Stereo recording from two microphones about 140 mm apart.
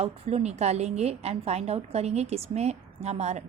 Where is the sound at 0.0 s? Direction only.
45° right (ahead or behind).